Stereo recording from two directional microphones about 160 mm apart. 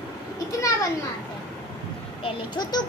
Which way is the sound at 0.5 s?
20° left (ahead or behind).